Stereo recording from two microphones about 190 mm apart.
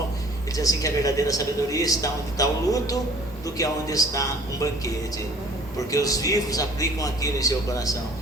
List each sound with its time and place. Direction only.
0.5 s a man's voice: 20° left (ahead or behind)
5.9 s a man's voice: 20° left (ahead or behind)